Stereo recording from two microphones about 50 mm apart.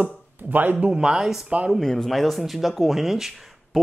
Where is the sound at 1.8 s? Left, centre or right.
Centre.